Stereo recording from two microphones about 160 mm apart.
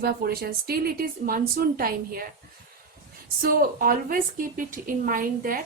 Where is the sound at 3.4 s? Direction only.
65° right (ahead or behind).